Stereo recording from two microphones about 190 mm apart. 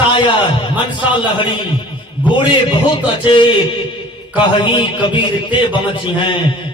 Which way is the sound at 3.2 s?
25° left (ahead or behind).